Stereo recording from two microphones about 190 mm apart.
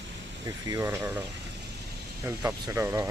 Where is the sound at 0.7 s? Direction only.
15° right (ahead or behind).